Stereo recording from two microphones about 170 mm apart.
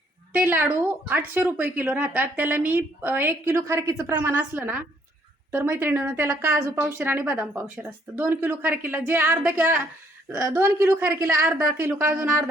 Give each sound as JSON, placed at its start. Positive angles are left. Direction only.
{"t": 0.3, "sound": "speech", "side_deg": -10}